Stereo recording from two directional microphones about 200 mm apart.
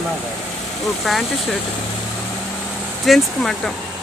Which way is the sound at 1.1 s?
Centre (ahead or behind).